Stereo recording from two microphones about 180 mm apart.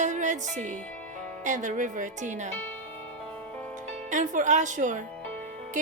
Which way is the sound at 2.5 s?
10° left (ahead or behind).